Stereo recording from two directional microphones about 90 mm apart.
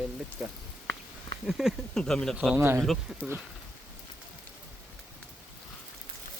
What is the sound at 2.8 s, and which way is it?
Speech, centre (ahead or behind).